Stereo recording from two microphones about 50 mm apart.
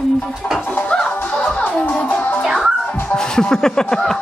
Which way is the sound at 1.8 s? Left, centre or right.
Left.